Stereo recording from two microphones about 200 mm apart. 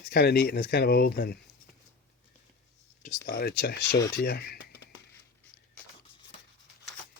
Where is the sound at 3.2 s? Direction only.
55° left (ahead or behind).